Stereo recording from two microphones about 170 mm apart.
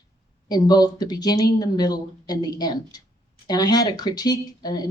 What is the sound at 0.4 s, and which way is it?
Speech, 25° left (ahead or behind).